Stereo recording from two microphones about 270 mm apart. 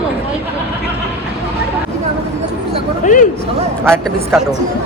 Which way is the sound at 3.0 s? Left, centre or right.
Left.